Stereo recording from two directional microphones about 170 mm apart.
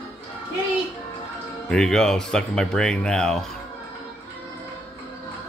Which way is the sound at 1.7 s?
5° left (ahead or behind).